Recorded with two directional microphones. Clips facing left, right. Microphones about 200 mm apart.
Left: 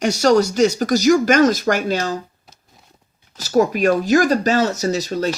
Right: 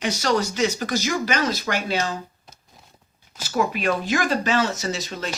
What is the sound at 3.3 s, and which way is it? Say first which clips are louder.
Speech: left 8 dB; 40° left (ahead or behind).